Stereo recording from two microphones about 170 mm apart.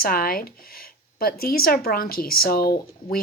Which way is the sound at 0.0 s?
60° left (ahead or behind).